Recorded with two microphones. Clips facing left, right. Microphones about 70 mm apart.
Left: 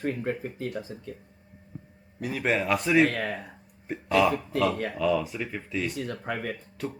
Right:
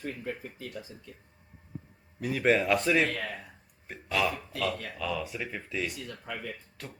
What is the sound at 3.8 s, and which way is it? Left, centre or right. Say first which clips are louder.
Speech: left 7 dB; centre.